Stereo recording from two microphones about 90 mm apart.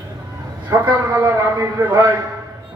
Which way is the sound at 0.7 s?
35° right (ahead or behind).